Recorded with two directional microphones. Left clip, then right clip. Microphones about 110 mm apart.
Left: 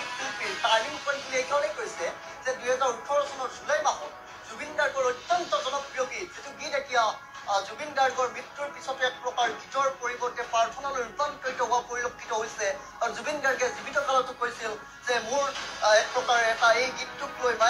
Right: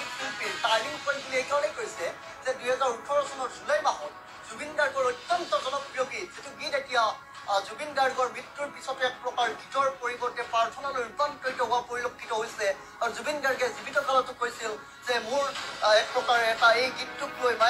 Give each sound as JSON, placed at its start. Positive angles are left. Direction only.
{"t": 0.0, "sound": "speech", "side_deg": -30}